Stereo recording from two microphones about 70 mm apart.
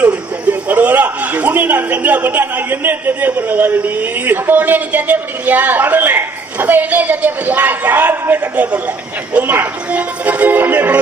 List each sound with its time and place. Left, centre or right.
0.7 s a man's voice: right